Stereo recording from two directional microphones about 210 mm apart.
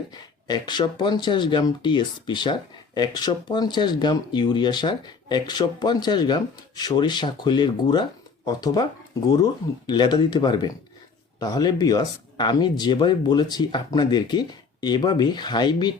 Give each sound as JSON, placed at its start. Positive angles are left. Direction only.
{"t": 0.1, "sound": "speech", "side_deg": 20}